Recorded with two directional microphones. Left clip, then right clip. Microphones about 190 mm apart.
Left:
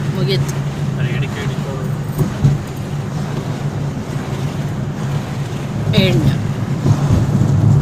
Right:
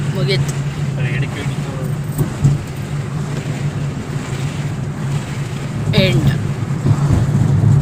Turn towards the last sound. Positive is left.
turn(degrees=0)  # may be behind; listen again after turning